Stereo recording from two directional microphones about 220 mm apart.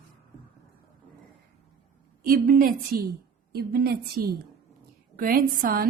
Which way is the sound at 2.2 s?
40° right (ahead or behind).